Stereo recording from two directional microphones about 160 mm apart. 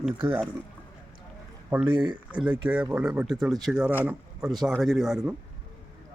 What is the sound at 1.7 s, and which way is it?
Speech, 10° right (ahead or behind).